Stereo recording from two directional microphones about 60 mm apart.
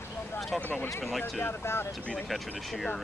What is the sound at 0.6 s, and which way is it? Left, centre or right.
Speech, left.